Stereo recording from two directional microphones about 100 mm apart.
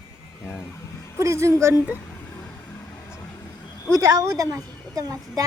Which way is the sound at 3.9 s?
30° right (ahead or behind).